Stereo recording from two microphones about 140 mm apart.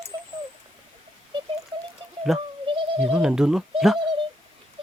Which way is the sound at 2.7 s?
40° right (ahead or behind).